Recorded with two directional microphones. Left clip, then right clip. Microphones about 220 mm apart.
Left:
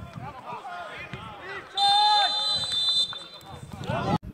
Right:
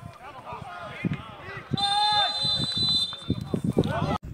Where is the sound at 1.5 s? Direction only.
15° left (ahead or behind).